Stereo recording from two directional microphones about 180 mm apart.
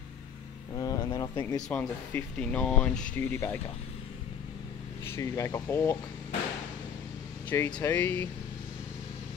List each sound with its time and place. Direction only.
0.7 s speech: 20° left (ahead or behind)
1.7 s speech: 10° left (ahead or behind)
5.0 s speech: 15° left (ahead or behind)
7.4 s speech: 10° left (ahead or behind)